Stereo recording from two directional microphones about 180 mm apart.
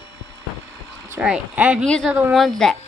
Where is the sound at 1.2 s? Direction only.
5° right (ahead or behind).